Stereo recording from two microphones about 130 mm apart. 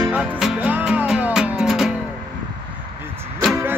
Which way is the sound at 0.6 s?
10° right (ahead or behind).